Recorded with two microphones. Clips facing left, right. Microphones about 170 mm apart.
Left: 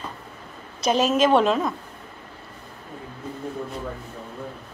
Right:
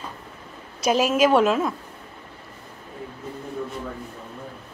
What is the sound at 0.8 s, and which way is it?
Speech, 10° right (ahead or behind).